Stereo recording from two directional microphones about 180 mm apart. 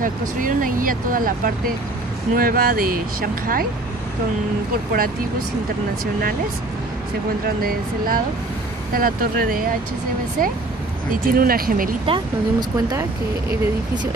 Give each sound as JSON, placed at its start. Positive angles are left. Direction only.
{"t": 0.0, "sound": "speech", "side_deg": -50}
{"t": 7.4, "sound": "speech", "side_deg": -55}
{"t": 11.3, "sound": "speech", "side_deg": -55}
{"t": 12.1, "sound": "speech", "side_deg": -20}